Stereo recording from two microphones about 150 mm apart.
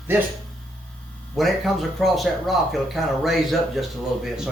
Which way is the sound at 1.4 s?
Centre (ahead or behind).